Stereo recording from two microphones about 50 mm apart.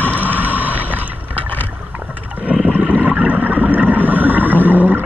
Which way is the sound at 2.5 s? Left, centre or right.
Right.